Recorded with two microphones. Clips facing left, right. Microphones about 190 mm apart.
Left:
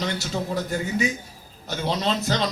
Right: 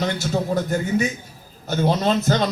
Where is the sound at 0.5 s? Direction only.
45° right (ahead or behind).